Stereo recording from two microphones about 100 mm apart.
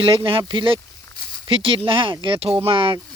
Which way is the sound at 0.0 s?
60° right (ahead or behind).